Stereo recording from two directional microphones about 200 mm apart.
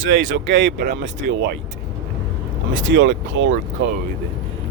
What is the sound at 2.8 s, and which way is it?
Speech, 70° right (ahead or behind).